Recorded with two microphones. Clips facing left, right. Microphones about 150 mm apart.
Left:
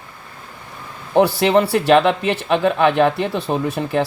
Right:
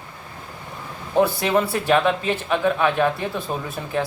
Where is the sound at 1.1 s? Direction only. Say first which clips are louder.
Left 5 dB; 85° left.